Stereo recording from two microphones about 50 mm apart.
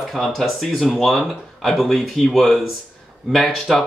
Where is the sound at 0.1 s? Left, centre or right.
Centre.